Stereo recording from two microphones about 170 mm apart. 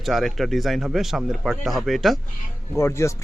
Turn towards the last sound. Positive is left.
turn(degrees=15)  # may be behind; listen again after turning